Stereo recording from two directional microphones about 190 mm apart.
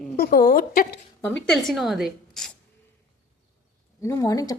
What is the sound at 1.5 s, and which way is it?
A woman's voice, centre (ahead or behind).